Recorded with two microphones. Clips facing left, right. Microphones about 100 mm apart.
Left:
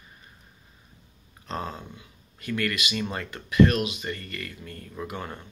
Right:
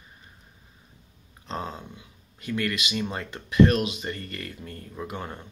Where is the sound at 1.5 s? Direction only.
20° right (ahead or behind).